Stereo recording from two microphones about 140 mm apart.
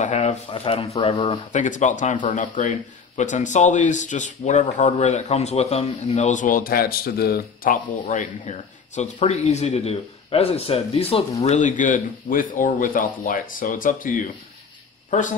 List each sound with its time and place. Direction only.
0.0 s a sound: 55° left (ahead or behind)
0.5 s speech: 35° left (ahead or behind)
0.7 s speech: 50° left (ahead or behind); by 14.3 s 75° left (ahead or behind)
15.0 s speech: 65° left (ahead or behind)